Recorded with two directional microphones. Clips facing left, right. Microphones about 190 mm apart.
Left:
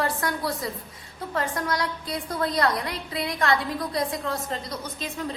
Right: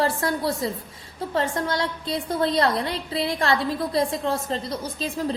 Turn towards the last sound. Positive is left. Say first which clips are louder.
# right 5 dB
turn(degrees=-30)  # may be behind; listen again after turning